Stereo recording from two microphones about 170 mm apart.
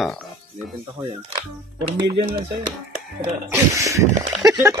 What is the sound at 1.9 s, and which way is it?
Speech, 30° right (ahead or behind).